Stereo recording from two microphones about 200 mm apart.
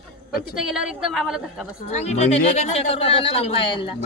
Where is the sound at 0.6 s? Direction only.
5° right (ahead or behind).